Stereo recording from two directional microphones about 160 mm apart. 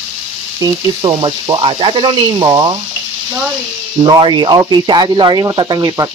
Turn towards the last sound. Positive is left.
turn(degrees=-20)  # may be behind; listen again after turning